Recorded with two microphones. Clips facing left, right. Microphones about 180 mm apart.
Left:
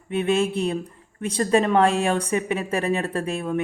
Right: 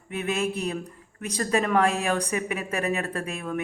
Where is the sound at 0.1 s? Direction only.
30° left (ahead or behind).